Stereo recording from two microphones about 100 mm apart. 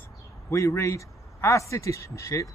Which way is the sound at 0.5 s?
30° left (ahead or behind).